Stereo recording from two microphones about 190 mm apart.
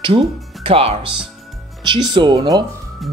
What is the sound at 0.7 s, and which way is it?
Speech, 30° right (ahead or behind).